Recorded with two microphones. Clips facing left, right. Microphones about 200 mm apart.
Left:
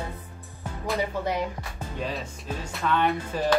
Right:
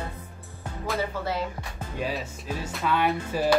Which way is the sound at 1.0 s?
15° left (ahead or behind).